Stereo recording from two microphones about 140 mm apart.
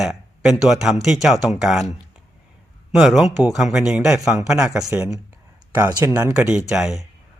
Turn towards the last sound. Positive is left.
turn(degrees=-5)  # may be behind; listen again after turning